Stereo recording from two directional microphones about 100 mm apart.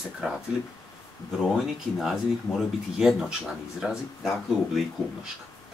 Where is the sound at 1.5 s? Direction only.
5° right (ahead or behind).